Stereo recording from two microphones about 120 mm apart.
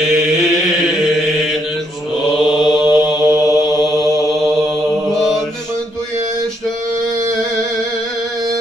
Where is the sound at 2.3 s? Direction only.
5° right (ahead or behind).